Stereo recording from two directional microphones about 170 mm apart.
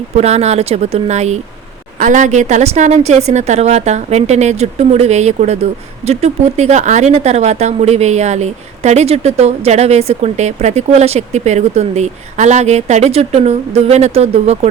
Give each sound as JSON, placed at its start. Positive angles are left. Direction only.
{"t": 0.2, "sound": "speech", "side_deg": -40}